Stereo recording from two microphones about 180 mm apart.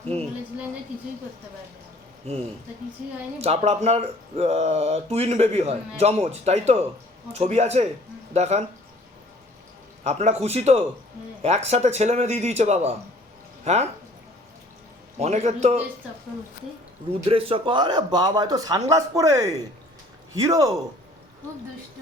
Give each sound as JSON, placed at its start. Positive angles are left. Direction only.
{"t": 0.0, "sound": "a sound", "side_deg": -35}
{"t": 3.4, "sound": "speech", "side_deg": -35}
{"t": 10.0, "sound": "speech", "side_deg": -35}
{"t": 15.2, "sound": "speech", "side_deg": -40}
{"t": 17.2, "sound": "a man's voice", "side_deg": -30}